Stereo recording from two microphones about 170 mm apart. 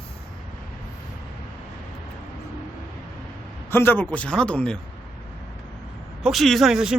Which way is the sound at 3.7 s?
10° left (ahead or behind).